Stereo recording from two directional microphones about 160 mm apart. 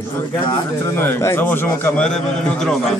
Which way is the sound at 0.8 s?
15° left (ahead or behind).